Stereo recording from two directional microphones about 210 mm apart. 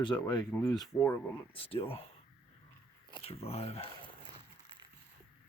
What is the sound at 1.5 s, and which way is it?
Speech, 25° left (ahead or behind).